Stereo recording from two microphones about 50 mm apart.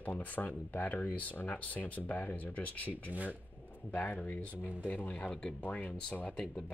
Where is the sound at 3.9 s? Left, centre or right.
Left.